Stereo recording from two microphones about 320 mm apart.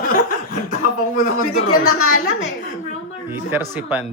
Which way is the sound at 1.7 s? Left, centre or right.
Left.